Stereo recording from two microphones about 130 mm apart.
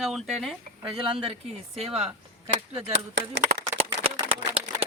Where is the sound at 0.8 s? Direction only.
45° right (ahead or behind).